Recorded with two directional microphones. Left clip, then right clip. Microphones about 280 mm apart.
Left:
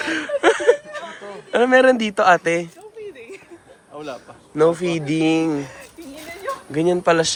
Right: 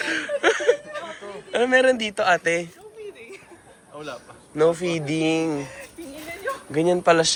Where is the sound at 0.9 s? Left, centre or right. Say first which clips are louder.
Left 2 dB; left.